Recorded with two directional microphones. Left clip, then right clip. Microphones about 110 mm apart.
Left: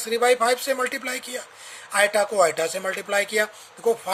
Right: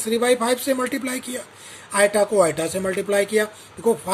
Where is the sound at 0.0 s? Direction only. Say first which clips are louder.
Even; 30° left (ahead or behind).